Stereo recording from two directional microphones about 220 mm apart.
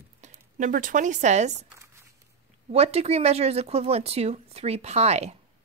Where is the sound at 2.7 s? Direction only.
30° right (ahead or behind).